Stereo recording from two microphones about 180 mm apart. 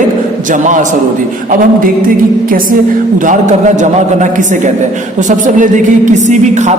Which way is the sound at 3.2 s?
45° right (ahead or behind).